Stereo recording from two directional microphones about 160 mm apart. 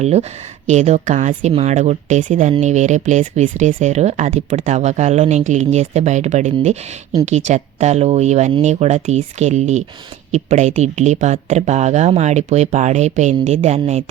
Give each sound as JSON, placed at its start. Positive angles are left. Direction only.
{"t": 0.0, "sound": "speech", "side_deg": -40}